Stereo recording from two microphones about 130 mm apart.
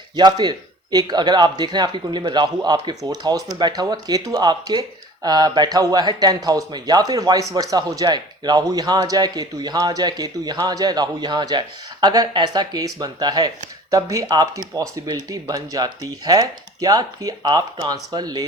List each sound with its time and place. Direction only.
0.2 s speech: 35° right (ahead or behind)